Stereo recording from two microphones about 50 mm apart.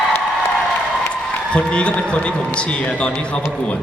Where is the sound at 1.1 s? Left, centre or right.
Left.